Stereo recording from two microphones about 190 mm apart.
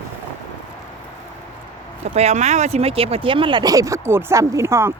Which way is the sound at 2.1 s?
35° right (ahead or behind).